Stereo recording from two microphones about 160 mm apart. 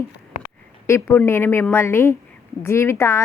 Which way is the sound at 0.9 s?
15° left (ahead or behind).